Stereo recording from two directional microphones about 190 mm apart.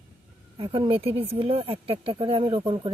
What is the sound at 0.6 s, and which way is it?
Speech, 25° right (ahead or behind).